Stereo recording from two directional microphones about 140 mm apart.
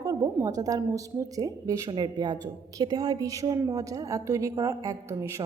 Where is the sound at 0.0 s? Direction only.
25° right (ahead or behind).